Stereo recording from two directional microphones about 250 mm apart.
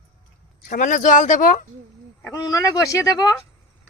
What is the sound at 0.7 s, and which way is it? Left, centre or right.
Speech, left.